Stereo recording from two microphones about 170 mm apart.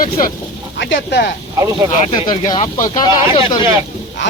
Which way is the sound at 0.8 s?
85° left.